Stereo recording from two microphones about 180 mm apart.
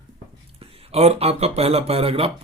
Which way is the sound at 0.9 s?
35° right (ahead or behind).